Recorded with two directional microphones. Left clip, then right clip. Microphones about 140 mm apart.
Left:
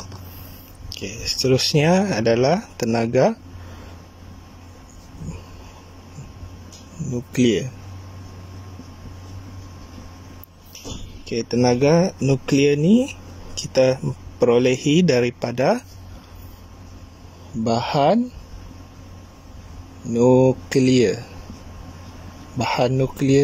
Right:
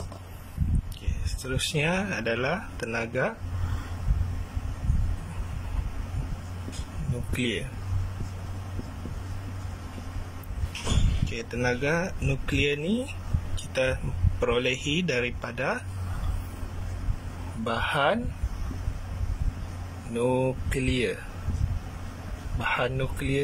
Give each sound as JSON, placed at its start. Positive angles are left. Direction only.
{"t": 1.2, "sound": "speech", "side_deg": 65}
{"t": 7.3, "sound": "speech", "side_deg": 75}
{"t": 11.2, "sound": "speech", "side_deg": 65}
{"t": 17.6, "sound": "speech", "side_deg": 70}
{"t": 20.2, "sound": "speech", "side_deg": 65}
{"t": 22.6, "sound": "speech", "side_deg": 70}